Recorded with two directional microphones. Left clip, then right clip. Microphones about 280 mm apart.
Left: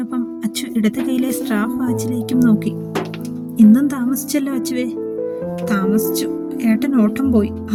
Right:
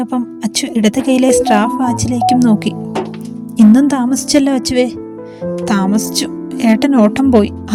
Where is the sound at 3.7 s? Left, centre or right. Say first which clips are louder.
Right 6 dB; left.